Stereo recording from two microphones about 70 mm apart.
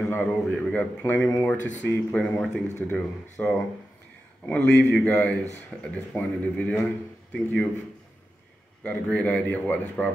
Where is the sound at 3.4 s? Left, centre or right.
Left.